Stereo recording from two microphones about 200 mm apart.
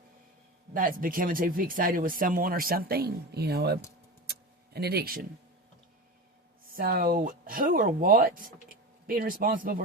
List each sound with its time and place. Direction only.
0.7 s speech: 45° right (ahead or behind)
4.3 s tick-tock: 55° right (ahead or behind)
6.7 s speech: 45° right (ahead or behind)